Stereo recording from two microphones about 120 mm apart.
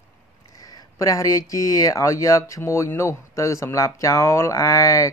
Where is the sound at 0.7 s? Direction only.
30° left (ahead or behind).